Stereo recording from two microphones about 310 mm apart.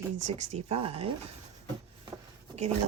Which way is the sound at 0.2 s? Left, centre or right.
Right.